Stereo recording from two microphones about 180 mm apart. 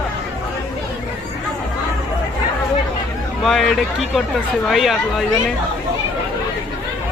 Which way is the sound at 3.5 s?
Centre (ahead or behind).